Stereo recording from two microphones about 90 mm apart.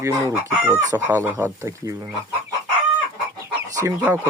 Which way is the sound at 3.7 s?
35° right (ahead or behind).